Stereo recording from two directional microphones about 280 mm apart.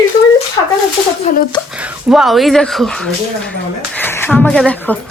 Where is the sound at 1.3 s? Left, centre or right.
Left.